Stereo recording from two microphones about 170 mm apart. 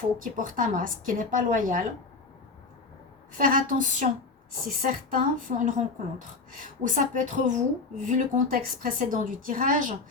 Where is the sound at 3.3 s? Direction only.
55° right (ahead or behind).